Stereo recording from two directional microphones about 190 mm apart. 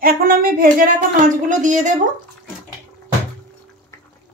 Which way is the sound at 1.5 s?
40° right (ahead or behind).